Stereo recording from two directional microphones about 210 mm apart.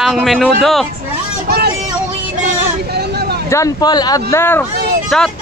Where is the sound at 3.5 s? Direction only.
15° left (ahead or behind); by 5.3 s centre (ahead or behind).